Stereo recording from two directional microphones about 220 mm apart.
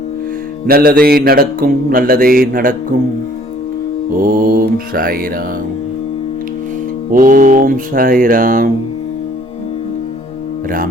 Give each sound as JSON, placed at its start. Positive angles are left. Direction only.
{"t": 0.7, "sound": "mantra", "side_deg": -45}
{"t": 4.2, "sound": "mantra", "side_deg": -40}
{"t": 7.1, "sound": "mantra", "side_deg": -35}